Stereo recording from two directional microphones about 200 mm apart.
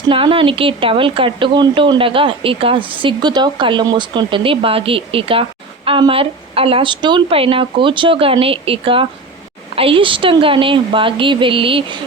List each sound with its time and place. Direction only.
0.1 s a woman's voice: 25° right (ahead or behind)